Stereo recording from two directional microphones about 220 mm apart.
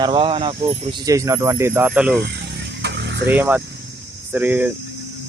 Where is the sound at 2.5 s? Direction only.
50° right (ahead or behind).